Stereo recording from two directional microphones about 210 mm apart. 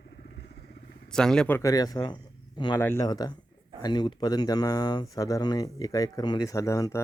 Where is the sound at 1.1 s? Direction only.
5° left (ahead or behind).